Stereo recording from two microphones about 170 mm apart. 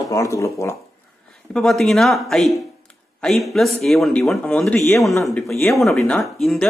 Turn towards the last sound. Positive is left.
turn(degrees=0)  # may be behind; listen again after turning